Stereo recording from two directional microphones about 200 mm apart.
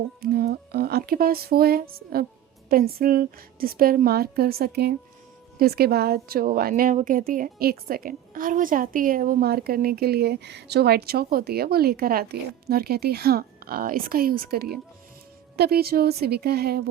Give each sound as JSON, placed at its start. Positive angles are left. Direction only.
{"t": 0.2, "sound": "a woman's voice", "side_deg": -50}